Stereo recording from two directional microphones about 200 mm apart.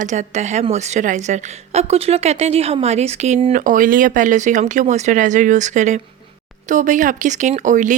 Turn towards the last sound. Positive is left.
turn(degrees=-40)  # may be behind; listen again after turning